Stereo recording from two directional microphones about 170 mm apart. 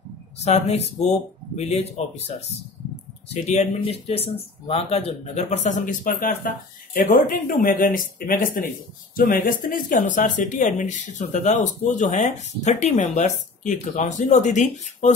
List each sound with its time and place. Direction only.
0.4 s speech: 40° left (ahead or behind)
3.4 s speech: 40° left (ahead or behind)